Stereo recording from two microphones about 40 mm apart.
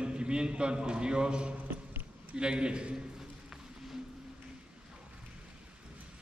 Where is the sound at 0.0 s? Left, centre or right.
Right.